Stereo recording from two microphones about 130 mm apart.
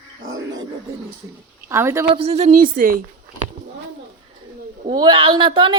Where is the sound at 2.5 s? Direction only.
90° right.